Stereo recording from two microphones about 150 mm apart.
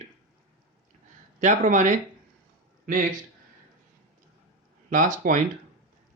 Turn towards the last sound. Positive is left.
turn(degrees=-60)  # may be behind; listen again after turning